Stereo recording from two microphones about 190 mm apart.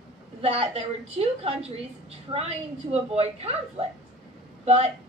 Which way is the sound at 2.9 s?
35° right (ahead or behind).